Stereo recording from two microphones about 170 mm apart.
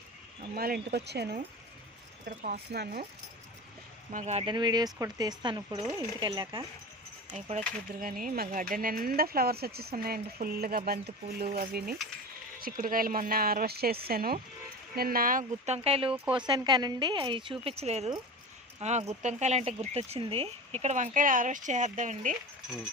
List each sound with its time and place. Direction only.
0.5 s speech: 65° right (ahead or behind)
2.2 s speech: 50° right (ahead or behind)
2.7 s speech: 65° right (ahead or behind)
4.1 s speech: 45° right (ahead or behind)
4.4 s speech: 25° right (ahead or behind)
8.0 s speech: 55° right (ahead or behind)